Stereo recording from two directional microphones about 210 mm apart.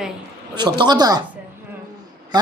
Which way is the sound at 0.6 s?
20° right (ahead or behind).